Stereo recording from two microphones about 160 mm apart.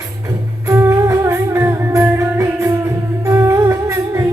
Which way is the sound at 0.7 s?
15° right (ahead or behind).